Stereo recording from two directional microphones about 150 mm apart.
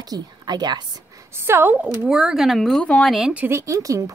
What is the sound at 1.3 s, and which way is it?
Speech, 15° right (ahead or behind).